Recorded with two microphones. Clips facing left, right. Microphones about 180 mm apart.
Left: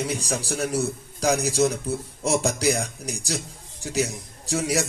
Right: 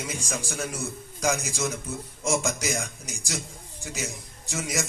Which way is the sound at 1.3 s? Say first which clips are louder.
Left 8 dB; 65° left (ahead or behind).